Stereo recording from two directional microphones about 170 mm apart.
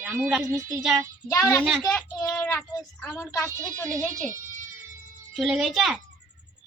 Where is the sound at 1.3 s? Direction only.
15° left (ahead or behind).